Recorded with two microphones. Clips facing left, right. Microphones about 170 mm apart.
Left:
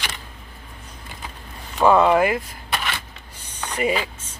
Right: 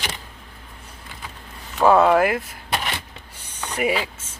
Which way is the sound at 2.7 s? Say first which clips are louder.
Right 1 dB; 25° right (ahead or behind).